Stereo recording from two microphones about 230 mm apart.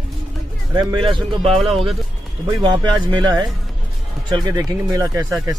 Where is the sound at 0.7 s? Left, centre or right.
Right.